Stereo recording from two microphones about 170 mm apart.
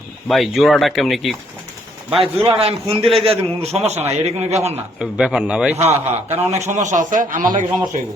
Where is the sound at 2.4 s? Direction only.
35° right (ahead or behind).